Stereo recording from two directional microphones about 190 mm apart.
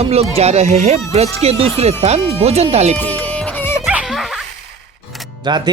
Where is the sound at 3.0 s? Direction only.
10° left (ahead or behind).